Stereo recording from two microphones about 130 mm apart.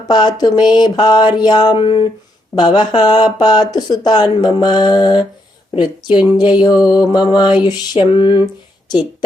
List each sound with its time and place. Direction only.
0.1 s speech: 35° left (ahead or behind)